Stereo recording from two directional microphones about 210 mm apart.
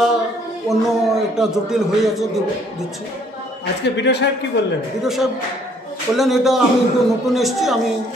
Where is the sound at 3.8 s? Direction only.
55° left (ahead or behind).